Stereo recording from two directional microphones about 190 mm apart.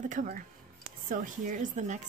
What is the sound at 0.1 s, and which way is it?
Speech, 45° right (ahead or behind).